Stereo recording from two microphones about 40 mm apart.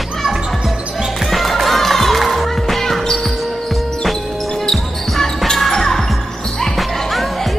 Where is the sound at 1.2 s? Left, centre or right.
Centre.